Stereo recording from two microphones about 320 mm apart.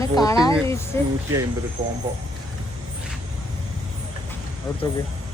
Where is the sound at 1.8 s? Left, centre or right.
Right.